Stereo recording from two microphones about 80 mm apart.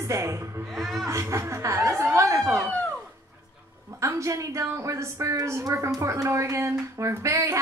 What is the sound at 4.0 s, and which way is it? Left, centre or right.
Speech, right.